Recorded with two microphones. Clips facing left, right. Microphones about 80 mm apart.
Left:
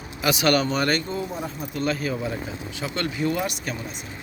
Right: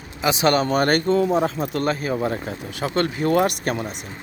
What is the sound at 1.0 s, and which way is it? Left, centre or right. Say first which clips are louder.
Speech: right 11 dB; right.